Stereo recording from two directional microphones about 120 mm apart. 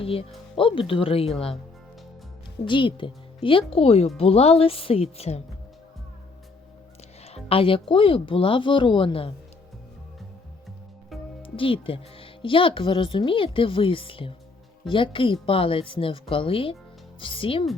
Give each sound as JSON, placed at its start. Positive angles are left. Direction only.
{"t": 0.0, "sound": "a woman's voice", "side_deg": 50}
{"t": 2.6, "sound": "a woman's voice", "side_deg": 45}
{"t": 7.3, "sound": "a woman's voice", "side_deg": 55}
{"t": 11.4, "sound": "a woman's voice", "side_deg": 50}